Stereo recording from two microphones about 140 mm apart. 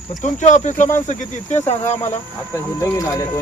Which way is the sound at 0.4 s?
60° left (ahead or behind).